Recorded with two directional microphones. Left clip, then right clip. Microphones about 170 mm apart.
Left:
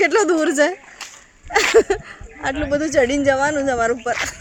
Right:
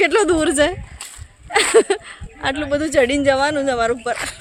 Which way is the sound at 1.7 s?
5° right (ahead or behind).